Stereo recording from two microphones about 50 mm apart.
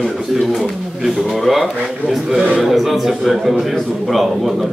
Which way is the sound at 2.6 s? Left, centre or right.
Centre.